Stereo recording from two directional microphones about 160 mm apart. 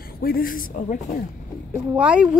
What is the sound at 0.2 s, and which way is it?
Speech, 65° left (ahead or behind).